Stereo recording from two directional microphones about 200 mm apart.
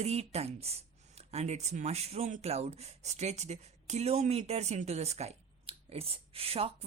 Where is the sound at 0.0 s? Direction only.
35° right (ahead or behind).